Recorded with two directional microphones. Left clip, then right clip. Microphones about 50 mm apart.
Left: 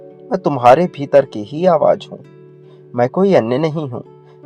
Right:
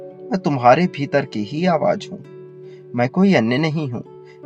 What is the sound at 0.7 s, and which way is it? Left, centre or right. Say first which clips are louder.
Speech: left 5 dB; left.